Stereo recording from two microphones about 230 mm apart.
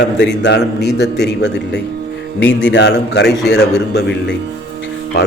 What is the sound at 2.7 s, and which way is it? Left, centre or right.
A man's voice, left.